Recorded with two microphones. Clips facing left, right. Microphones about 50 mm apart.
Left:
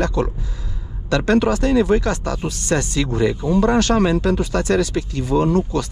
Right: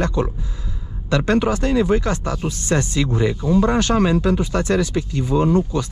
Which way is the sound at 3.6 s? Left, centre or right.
Right.